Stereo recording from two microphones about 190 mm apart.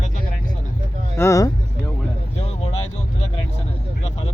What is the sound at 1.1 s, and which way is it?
Vehicle, 15° left (ahead or behind).